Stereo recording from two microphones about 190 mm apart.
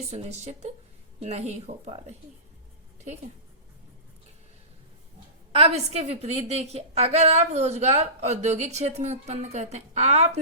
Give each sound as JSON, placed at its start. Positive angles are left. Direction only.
{"t": 0.1, "sound": "a woman's voice", "side_deg": -35}
{"t": 5.5, "sound": "a woman's voice", "side_deg": -30}